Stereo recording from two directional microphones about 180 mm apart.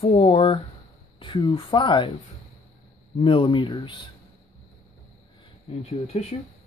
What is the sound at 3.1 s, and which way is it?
Speech, 30° left (ahead or behind).